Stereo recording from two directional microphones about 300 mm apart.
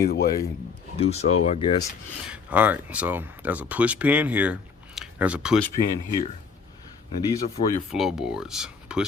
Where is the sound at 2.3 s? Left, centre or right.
Centre.